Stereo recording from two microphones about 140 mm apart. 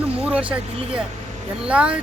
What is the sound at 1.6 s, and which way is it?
Speech, 10° right (ahead or behind).